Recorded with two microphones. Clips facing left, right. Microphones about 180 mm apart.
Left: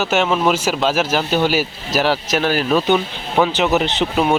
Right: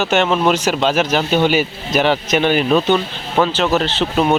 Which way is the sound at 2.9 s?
10° left (ahead or behind).